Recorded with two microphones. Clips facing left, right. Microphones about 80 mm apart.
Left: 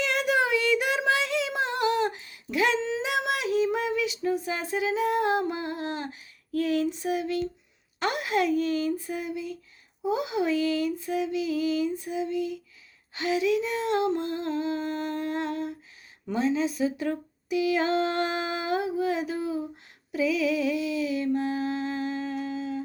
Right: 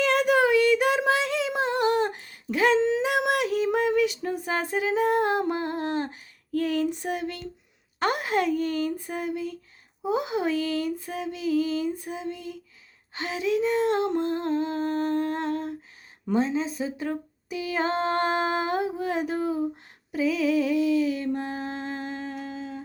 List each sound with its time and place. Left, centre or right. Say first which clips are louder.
0.0 s child singing: right 4 dB; right
7.9 s female singing: right 1 dB; right
16.2 s humming: right 1 dB; right
20.1 s a sound: right 2 dB; right